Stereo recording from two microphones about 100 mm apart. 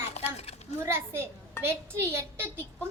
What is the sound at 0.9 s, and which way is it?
A woman's voice, 25° right (ahead or behind).